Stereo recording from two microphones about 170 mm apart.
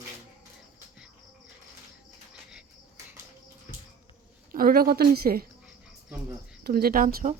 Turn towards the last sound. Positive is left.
turn(degrees=-60)  # may be behind; listen again after turning